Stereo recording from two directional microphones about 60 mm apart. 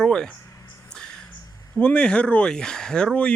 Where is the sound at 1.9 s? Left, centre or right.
Centre.